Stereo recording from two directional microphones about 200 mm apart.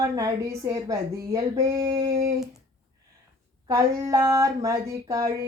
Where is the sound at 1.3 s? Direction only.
15° right (ahead or behind).